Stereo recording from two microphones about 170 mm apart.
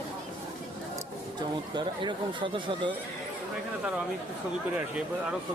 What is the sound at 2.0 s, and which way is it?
Speech, 30° right (ahead or behind).